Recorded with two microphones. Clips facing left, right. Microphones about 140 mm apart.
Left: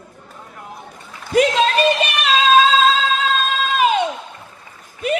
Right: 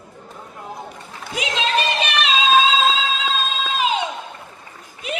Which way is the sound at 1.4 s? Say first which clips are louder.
Left 10 dB; 50° left (ahead or behind).